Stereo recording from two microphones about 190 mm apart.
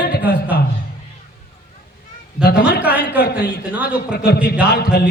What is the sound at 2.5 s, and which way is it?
Speech, 60° left (ahead or behind).